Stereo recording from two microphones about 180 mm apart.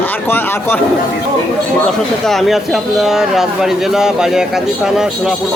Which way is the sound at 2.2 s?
Centre (ahead or behind).